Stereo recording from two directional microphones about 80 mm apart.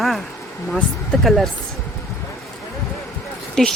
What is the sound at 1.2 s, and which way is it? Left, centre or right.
Speech, centre.